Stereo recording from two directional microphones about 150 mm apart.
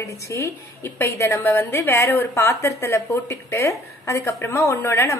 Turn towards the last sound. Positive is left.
turn(degrees=20)  # may be behind; listen again after turning